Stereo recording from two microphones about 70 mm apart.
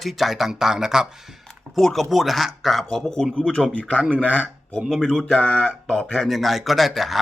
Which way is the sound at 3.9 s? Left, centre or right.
Right.